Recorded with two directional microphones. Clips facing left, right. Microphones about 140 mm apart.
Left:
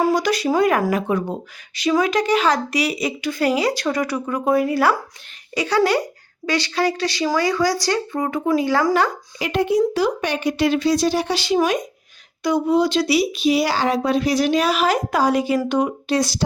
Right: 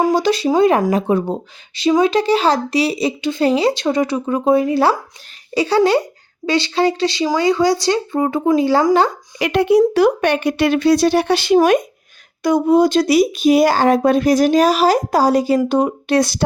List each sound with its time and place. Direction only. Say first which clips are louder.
0.1 s speech: right 3 dB; 30° right (ahead or behind)
9.4 s speech: right 5 dB; 70° right (ahead or behind)
12.4 s speech: right 5 dB; 45° right (ahead or behind)
16.0 s speech: right 4 dB; 60° right (ahead or behind)